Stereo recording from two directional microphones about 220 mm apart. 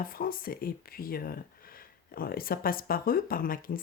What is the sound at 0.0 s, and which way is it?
Speech, 40° left (ahead or behind).